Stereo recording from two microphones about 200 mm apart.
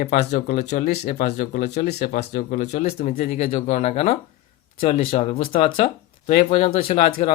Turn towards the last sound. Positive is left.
turn(degrees=40)  # may be behind; listen again after turning